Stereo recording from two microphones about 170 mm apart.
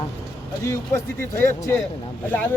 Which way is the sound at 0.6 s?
15° left (ahead or behind).